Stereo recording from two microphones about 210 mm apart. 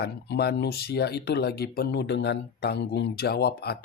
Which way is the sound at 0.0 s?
50° left (ahead or behind).